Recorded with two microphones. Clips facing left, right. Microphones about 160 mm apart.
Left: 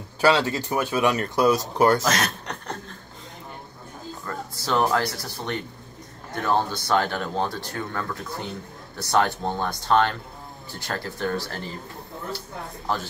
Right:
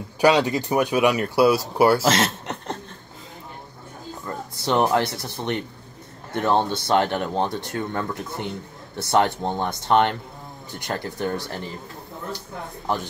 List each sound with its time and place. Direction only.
0.2 s speech: 15° right (ahead or behind)
2.0 s speech: 25° right (ahead or behind)
4.6 s speech: 25° right (ahead or behind)